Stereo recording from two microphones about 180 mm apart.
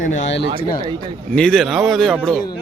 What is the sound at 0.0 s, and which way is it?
Speech, 40° left (ahead or behind).